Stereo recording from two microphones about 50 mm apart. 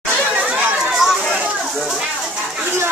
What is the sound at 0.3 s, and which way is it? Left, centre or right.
Chatter, right.